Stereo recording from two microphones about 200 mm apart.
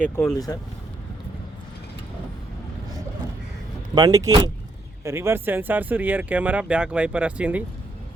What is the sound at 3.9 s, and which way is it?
Speech, 20° right (ahead or behind).